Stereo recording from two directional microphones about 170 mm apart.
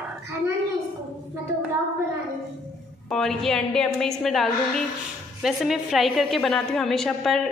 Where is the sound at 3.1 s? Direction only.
Centre (ahead or behind).